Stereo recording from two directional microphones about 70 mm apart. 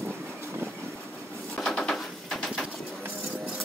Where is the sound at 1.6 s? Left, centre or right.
Centre.